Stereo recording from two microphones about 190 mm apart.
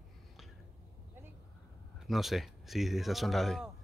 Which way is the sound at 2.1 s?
Centre (ahead or behind).